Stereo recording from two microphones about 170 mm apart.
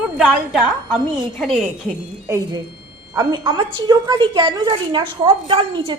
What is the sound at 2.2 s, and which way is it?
A woman's voice, 15° right (ahead or behind).